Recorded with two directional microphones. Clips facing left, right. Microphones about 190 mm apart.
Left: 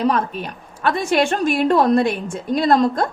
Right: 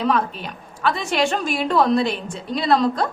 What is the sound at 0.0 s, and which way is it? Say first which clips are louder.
A woman's voice: left 2 dB; 45° left (ahead or behind).